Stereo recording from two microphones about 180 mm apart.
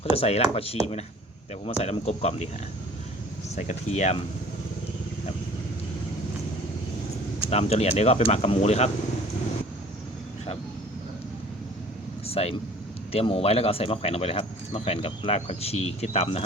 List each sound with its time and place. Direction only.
0.0 s speech: 35° left (ahead or behind)
3.5 s speech: 40° left (ahead or behind)
7.5 s speech: 35° left (ahead or behind)
12.2 s vehicle: 35° left (ahead or behind)
13.1 s speech: 30° left (ahead or behind)